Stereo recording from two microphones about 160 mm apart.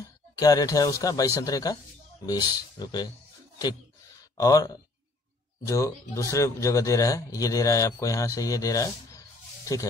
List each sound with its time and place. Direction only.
0.0 s speech: 20° left (ahead or behind)
4.4 s speech: 20° left (ahead or behind)